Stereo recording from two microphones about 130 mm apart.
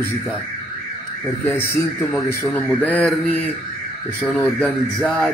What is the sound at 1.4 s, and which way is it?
A man's voice, 15° left (ahead or behind).